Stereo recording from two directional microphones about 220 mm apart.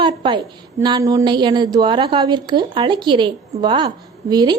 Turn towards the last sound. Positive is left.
turn(degrees=-20)  # may be behind; listen again after turning